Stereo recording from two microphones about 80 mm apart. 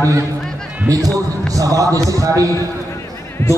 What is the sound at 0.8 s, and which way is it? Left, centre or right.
A man's voice, right.